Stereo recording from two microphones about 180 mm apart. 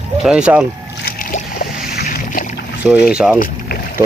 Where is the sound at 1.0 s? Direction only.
55° left (ahead or behind).